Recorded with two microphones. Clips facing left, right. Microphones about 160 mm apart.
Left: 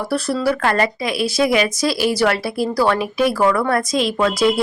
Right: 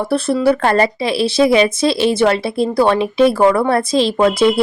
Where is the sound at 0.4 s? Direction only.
30° right (ahead or behind).